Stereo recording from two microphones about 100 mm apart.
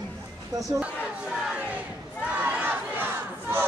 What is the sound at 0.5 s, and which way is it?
Speech, 35° right (ahead or behind).